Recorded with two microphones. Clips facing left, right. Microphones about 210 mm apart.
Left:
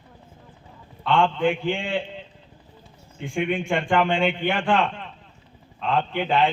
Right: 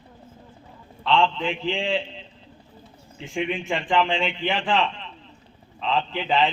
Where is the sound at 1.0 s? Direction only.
50° left (ahead or behind).